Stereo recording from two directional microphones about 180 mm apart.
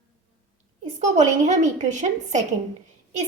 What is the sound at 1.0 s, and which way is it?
A woman's voice, 40° right (ahead or behind).